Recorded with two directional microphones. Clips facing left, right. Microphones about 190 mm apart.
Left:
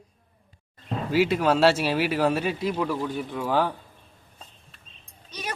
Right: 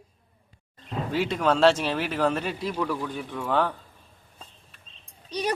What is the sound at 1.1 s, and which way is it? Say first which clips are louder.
Speech: left 3 dB; 5° left (ahead or behind).